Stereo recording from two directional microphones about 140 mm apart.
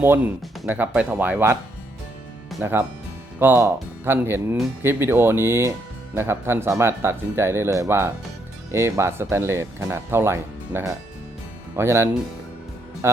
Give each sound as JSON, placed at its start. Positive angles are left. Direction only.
{"t": 0.7, "sound": "speech", "side_deg": -10}
{"t": 2.6, "sound": "speech", "side_deg": -15}